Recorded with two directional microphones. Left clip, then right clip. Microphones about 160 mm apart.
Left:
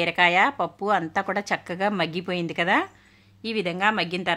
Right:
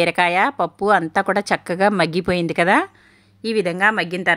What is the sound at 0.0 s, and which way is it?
A woman's voice, 35° right (ahead or behind).